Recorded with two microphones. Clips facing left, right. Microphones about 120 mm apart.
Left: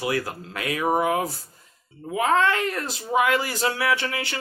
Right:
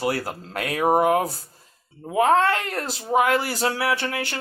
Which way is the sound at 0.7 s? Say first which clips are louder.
Right 4 dB; 50° right (ahead or behind).